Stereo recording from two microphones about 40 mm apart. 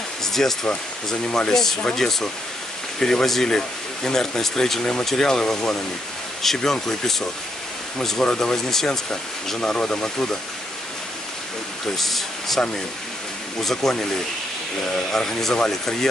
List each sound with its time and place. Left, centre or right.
0.2 s a sound: centre
0.7 s speech: centre
1.5 s speech: centre
9.6 s speech: left
12.0 s speech: centre
15.0 s speech: centre